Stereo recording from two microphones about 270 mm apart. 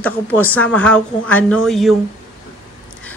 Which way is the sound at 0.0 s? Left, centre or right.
Centre.